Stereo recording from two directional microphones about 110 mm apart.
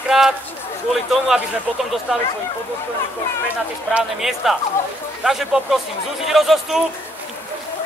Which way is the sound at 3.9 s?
5° right (ahead or behind).